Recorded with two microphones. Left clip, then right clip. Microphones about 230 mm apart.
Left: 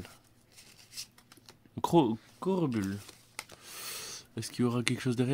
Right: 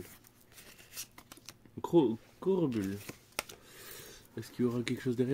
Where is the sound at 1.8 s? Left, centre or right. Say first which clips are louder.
Left 2 dB; left.